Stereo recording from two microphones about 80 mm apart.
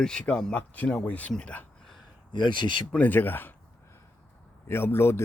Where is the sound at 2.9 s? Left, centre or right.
Left.